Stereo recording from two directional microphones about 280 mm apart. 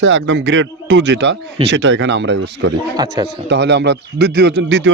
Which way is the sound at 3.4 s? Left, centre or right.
Right.